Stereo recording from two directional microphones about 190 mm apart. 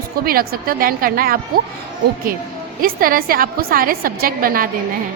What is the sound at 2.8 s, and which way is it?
A woman's voice, 50° right (ahead or behind).